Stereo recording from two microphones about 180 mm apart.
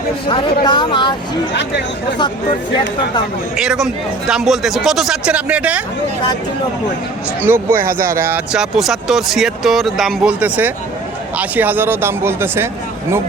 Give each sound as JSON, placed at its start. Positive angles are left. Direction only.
{"t": 0.3, "sound": "a woman's voice", "side_deg": 25}
{"t": 3.5, "sound": "speech", "side_deg": -5}
{"t": 7.4, "sound": "speech", "side_deg": -10}